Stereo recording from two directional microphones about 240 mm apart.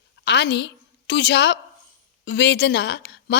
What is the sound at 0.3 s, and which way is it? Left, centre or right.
A woman's voice, left.